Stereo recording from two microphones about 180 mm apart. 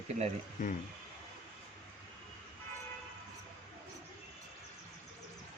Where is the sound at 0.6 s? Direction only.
50° left (ahead or behind).